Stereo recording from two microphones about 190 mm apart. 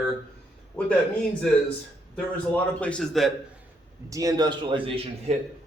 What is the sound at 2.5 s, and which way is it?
Speech, 5° left (ahead or behind).